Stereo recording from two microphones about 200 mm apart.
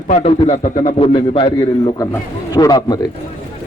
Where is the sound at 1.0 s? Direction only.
25° left (ahead or behind).